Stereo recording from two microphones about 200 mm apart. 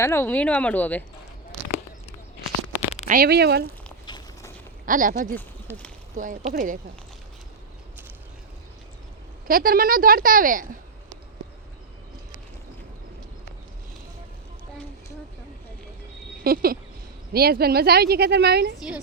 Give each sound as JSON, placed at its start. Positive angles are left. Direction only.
{"t": 0.0, "sound": "speech", "side_deg": 10}
{"t": 2.7, "sound": "a sound", "side_deg": 35}
{"t": 3.1, "sound": "speech", "side_deg": -50}
{"t": 4.0, "sound": "walk", "side_deg": 20}
{"t": 4.9, "sound": "speech", "side_deg": -40}
{"t": 5.3, "sound": "speech", "side_deg": 10}
{"t": 6.1, "sound": "speech", "side_deg": -40}
{"t": 9.5, "sound": "speech", "side_deg": -45}
{"t": 16.4, "sound": "speech", "side_deg": -50}